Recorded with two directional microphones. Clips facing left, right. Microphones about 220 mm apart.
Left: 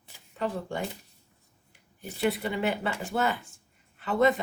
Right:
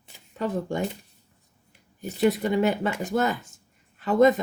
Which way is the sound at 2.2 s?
40° right (ahead or behind).